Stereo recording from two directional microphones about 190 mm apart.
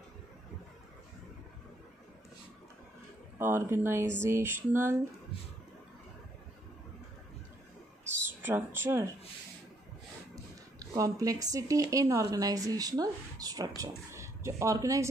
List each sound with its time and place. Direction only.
3.3 s speech: 10° right (ahead or behind)
8.4 s speech: 10° right (ahead or behind)
10.3 s speech: 15° right (ahead or behind)